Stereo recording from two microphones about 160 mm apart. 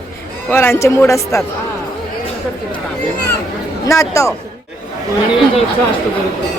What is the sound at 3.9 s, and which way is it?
Speech, 20° left (ahead or behind).